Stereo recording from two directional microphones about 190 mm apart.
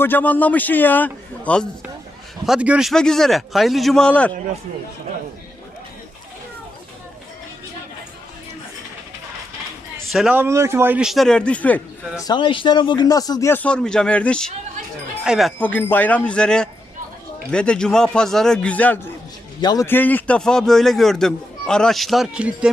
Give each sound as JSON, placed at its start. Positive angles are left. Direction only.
{"t": 0.0, "sound": "a man's voice", "side_deg": 10}
{"t": 2.5, "sound": "a man's voice", "side_deg": -5}
{"t": 10.1, "sound": "a man's voice", "side_deg": -5}
{"t": 12.2, "sound": "a man's voice", "side_deg": 25}